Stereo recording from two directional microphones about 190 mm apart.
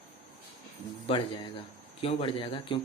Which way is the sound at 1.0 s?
30° left (ahead or behind).